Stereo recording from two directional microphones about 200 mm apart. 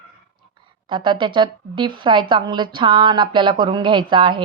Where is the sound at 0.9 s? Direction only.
25° right (ahead or behind).